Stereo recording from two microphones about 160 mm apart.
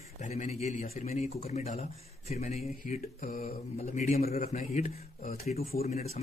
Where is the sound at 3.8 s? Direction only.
45° left (ahead or behind).